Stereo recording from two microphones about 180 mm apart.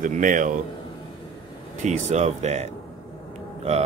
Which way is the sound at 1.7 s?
40° right (ahead or behind).